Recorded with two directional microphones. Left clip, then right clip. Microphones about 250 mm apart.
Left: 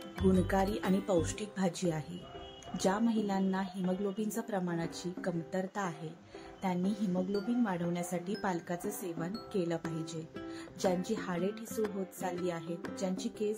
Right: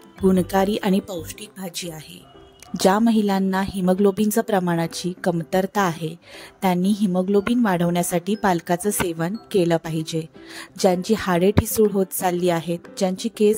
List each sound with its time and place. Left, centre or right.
0.3 s a woman's voice: right
1.0 s speech: centre
2.7 s a woman's voice: right